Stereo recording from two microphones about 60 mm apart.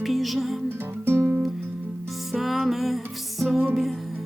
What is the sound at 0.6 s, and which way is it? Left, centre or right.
Music, right.